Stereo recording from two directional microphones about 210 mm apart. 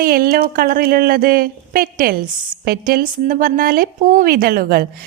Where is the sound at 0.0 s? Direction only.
45° right (ahead or behind).